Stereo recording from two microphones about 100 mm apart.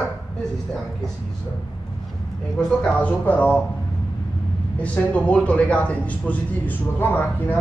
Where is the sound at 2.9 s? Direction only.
15° left (ahead or behind).